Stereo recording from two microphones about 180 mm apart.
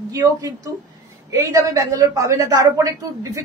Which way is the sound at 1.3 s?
15° right (ahead or behind).